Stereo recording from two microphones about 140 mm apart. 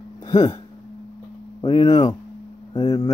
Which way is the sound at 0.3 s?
30° left (ahead or behind).